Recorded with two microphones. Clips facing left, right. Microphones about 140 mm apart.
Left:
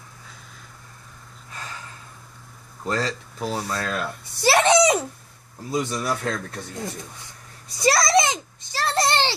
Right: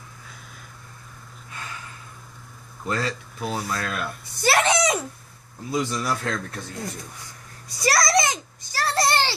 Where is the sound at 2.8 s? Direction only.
35° left (ahead or behind).